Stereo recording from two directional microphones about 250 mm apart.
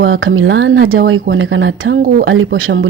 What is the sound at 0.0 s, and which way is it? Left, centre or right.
Speech, right.